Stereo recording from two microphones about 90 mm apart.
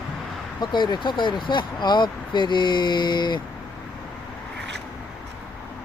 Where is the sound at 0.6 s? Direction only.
55° left (ahead or behind).